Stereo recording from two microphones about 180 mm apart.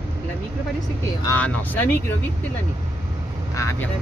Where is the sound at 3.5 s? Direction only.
15° left (ahead or behind).